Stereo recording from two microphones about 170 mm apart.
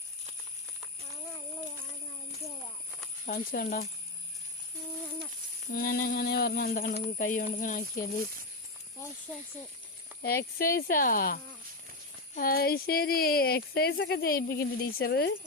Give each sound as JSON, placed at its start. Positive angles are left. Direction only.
{"t": 3.2, "sound": "speech", "side_deg": 55}
{"t": 5.7, "sound": "speech", "side_deg": 60}
{"t": 10.2, "sound": "speech", "side_deg": 60}